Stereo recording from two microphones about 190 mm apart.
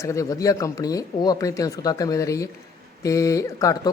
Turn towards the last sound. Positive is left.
turn(degrees=20)  # may be behind; listen again after turning